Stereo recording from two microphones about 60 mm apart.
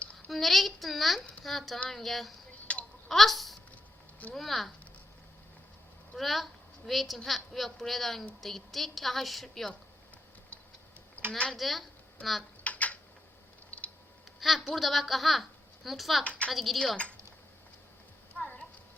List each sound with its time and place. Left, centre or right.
0.3 s a woman's voice: centre
2.7 s a sound: centre
3.1 s babbling: centre
4.4 s a woman's voice: centre
6.1 s a woman's voice: centre
11.3 s speech: centre
11.5 s speech: centre
12.6 s typing: left
13.7 s a sound: left
14.3 s a woman's voice: centre
16.2 s a woman's voice: left
16.5 s a woman's voice: centre
18.3 s clip-clop: left